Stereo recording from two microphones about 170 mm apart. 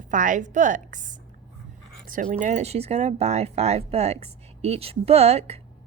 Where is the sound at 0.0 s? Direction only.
50° right (ahead or behind).